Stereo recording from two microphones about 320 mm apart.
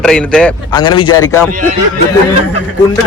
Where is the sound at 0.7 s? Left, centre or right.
Centre.